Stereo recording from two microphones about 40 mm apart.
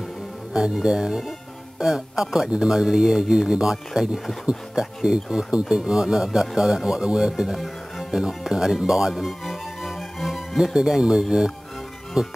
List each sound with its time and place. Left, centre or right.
0.5 s speech: centre
7.5 s music: centre
8.1 s speech: centre
9.4 s music: centre
12.2 s speech: centre